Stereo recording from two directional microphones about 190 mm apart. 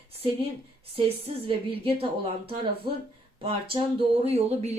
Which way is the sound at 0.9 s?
30° right (ahead or behind).